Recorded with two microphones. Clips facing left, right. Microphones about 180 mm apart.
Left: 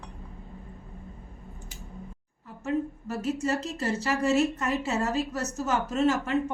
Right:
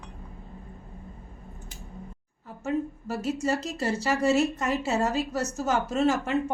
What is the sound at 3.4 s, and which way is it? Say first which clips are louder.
A woman's voice: right 1 dB; 35° right (ahead or behind).